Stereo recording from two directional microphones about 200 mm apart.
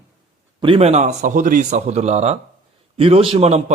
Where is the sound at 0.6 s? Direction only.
30° right (ahead or behind).